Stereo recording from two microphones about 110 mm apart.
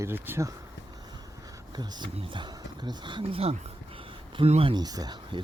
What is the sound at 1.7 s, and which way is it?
Speech, 40° right (ahead or behind).